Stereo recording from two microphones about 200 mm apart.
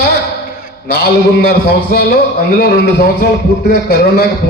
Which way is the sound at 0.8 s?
55° left (ahead or behind).